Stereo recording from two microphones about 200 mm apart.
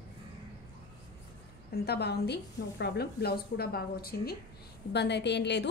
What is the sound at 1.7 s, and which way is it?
A woman's voice, 55° left (ahead or behind).